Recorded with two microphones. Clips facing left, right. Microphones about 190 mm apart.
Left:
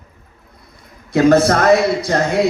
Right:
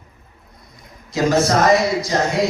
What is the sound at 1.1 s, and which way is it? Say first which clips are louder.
A man's voice: left 5 dB; 60° left (ahead or behind).